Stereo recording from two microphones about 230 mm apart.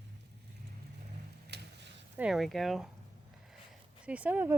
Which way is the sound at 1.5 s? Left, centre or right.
Right.